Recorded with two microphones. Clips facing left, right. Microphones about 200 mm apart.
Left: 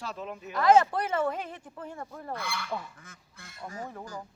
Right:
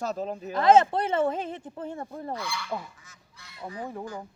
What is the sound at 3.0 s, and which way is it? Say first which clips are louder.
Goose: left 3 dB; 50° left (ahead or behind).